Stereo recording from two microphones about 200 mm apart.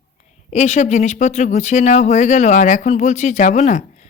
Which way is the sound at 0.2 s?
35° left (ahead or behind).